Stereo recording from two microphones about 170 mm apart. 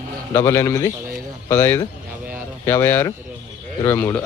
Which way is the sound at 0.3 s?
15° left (ahead or behind).